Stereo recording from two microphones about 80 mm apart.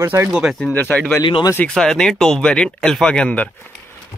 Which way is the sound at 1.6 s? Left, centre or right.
Centre.